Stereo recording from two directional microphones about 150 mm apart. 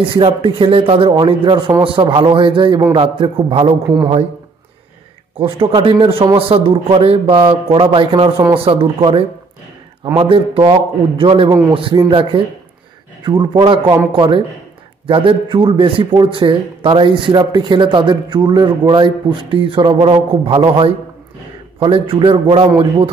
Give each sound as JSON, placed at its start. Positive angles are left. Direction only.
{"t": 0.0, "sound": "a man's voice", "side_deg": -35}
{"t": 5.4, "sound": "a man's voice", "side_deg": -35}